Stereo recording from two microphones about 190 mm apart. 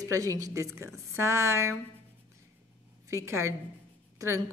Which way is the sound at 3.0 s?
15° right (ahead or behind).